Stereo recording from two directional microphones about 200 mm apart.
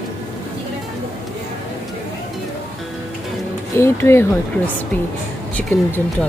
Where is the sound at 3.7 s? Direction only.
15° left (ahead or behind).